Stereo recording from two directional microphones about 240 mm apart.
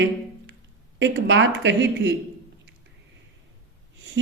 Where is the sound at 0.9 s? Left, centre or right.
Right.